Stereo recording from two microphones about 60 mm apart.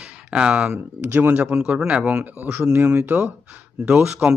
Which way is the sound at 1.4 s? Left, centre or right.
Centre.